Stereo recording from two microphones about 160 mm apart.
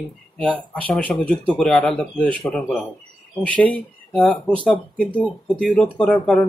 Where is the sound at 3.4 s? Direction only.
10° left (ahead or behind).